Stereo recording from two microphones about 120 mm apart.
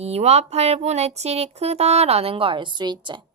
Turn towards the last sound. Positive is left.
turn(degrees=-40)  # may be behind; listen again after turning